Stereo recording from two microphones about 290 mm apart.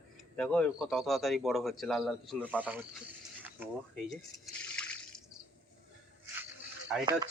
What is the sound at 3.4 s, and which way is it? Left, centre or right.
Drip, centre.